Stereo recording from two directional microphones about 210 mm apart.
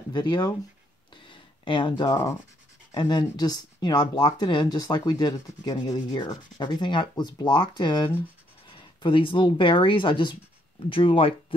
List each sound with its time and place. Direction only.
0.1 s speech: 20° left (ahead or behind)
1.1 s a sound: 25° left (ahead or behind)
2.9 s speech: 20° left (ahead or behind)